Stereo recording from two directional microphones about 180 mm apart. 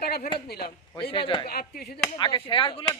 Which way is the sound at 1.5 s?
60° left (ahead or behind).